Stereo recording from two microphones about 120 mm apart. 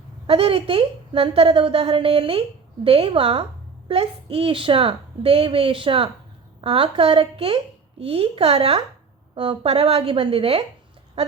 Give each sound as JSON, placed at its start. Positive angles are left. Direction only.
{"t": 0.3, "sound": "a woman's voice", "side_deg": -55}
{"t": 9.3, "sound": "a woman's voice", "side_deg": -45}
{"t": 9.6, "sound": "a woman's voice", "side_deg": -60}